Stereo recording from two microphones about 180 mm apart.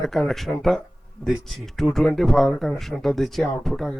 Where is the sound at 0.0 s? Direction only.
Centre (ahead or behind).